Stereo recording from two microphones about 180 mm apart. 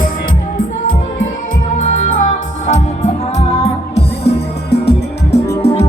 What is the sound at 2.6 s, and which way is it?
Music, 40° left (ahead or behind).